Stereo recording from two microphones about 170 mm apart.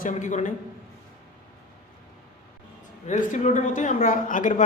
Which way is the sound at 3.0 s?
45° left (ahead or behind).